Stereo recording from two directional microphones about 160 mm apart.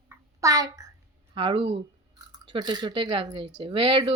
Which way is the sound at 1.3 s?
35° right (ahead or behind).